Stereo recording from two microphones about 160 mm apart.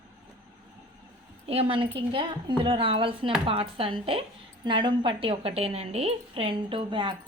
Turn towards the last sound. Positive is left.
turn(degrees=-30)  # may be behind; listen again after turning